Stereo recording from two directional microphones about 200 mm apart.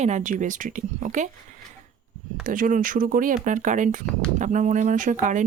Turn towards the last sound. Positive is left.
turn(degrees=-40)  # may be behind; listen again after turning